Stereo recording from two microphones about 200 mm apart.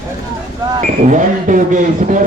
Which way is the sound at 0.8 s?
40° right (ahead or behind).